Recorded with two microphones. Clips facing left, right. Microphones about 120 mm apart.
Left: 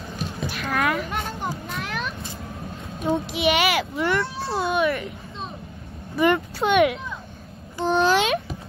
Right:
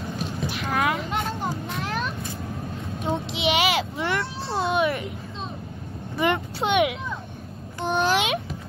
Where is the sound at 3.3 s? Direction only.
25° right (ahead or behind).